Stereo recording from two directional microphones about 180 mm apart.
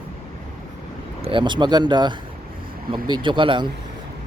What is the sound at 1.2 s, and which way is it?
Speech, 30° right (ahead or behind).